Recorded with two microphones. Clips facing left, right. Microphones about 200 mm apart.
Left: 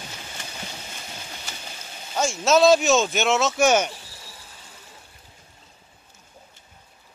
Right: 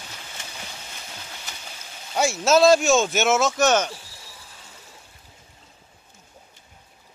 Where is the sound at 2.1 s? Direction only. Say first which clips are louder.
Right 1 dB; 5° right (ahead or behind).